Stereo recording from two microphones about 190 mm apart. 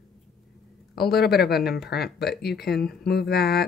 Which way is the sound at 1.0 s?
55° left (ahead or behind).